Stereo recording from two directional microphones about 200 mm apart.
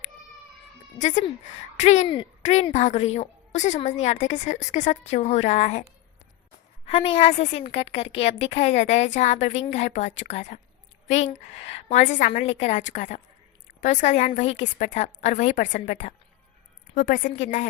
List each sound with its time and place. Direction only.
0.9 s a woman's voice: 35° left (ahead or behind)
6.8 s a woman's voice: 30° left (ahead or behind)